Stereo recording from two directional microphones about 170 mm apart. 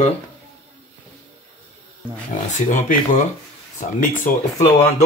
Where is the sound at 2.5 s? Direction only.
45° left (ahead or behind).